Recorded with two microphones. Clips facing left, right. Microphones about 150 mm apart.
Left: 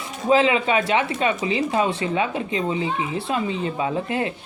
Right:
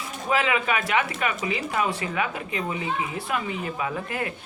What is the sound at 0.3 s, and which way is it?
Speech, 25° left (ahead or behind).